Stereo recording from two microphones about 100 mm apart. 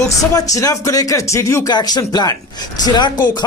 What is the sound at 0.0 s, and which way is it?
Speech, 35° left (ahead or behind).